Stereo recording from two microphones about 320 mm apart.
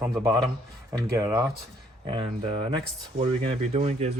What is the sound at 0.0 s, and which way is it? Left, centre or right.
Speech, centre.